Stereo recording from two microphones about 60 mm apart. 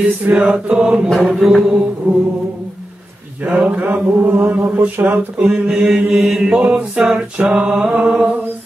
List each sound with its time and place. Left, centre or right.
0.3 s mantra: centre
1.0 s mantra: centre
2.1 s music: right
3.4 s mantra: right
5.4 s mantra: centre